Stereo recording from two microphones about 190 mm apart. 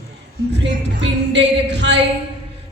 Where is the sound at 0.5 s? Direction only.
65° right (ahead or behind).